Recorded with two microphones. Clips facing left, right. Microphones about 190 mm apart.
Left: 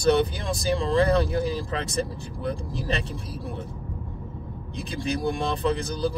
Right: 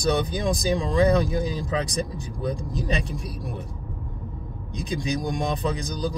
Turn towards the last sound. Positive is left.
turn(degrees=-15)  # may be behind; listen again after turning